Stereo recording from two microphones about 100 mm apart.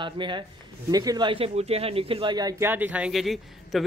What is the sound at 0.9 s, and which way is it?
Speech, 40° right (ahead or behind).